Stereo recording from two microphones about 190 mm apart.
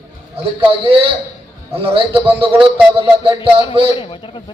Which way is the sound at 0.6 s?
25° right (ahead or behind).